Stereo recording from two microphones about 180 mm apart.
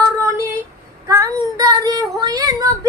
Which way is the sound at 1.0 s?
20° right (ahead or behind).